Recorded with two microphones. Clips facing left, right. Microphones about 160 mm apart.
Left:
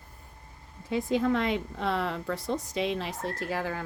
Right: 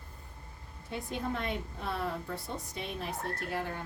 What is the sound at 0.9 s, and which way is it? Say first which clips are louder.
A woman's voice: left 10 dB; 90° left.